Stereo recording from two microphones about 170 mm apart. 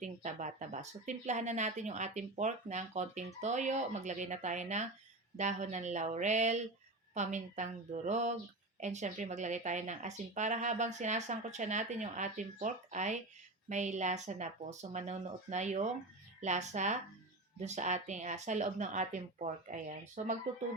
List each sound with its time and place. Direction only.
0.0 s a woman's voice: 45° right (ahead or behind)